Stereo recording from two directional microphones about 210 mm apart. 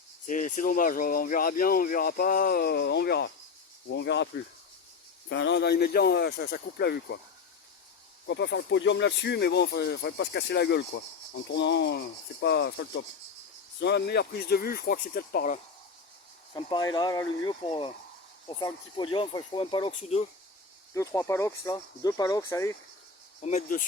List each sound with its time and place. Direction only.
0.3 s speech: 35° left (ahead or behind); by 4.3 s 55° left (ahead or behind)
5.3 s speech: 60° left (ahead or behind)
8.3 s speech: 55° left (ahead or behind); by 15.6 s 40° left (ahead or behind)
16.6 s speech: 20° left (ahead or behind)
20.9 s speech: 15° left (ahead or behind)
23.4 s speech: 35° left (ahead or behind)